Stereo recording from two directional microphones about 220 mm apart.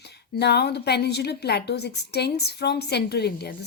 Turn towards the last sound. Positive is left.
turn(degrees=50)  # may be behind; listen again after turning